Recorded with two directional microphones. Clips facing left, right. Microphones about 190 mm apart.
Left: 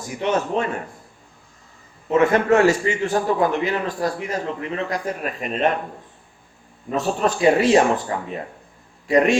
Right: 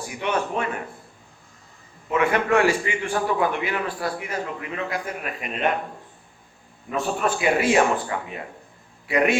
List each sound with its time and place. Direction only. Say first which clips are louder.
0.2 s a man's voice: left 4 dB; 35° left (ahead or behind)
2.0 s a man's voice: left 5 dB; 40° left (ahead or behind)
6.9 s a man's voice: left 3 dB; 35° left (ahead or behind)